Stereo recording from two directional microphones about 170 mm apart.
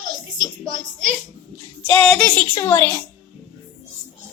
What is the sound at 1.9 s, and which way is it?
A woman's voice, 5° left (ahead or behind).